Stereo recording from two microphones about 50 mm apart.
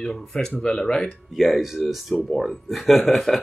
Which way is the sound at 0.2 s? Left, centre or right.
Centre.